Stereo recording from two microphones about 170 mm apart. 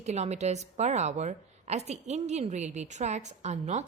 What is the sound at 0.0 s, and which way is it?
A woman's voice, 40° right (ahead or behind).